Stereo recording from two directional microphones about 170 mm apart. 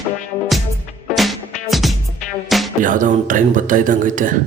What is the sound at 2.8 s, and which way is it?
Speech, 50° right (ahead or behind).